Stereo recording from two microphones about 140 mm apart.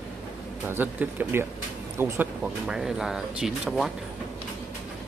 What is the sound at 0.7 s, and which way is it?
Speech, 15° right (ahead or behind).